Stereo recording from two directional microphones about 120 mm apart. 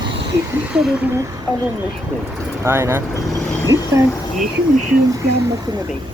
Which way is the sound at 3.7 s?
30° right (ahead or behind).